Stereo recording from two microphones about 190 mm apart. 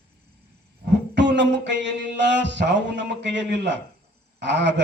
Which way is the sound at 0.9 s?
65° right (ahead or behind).